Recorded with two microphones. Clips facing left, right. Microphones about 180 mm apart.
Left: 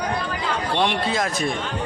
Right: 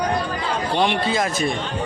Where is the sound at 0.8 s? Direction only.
Centre (ahead or behind).